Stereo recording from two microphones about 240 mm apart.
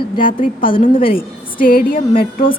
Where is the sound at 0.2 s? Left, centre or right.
Left.